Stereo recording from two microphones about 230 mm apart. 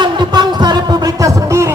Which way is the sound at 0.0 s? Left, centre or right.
Centre.